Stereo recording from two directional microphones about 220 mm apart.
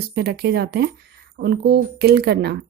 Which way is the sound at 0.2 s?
50° right (ahead or behind).